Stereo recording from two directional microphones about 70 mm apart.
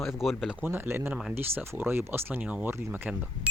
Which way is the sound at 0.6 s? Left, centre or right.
Right.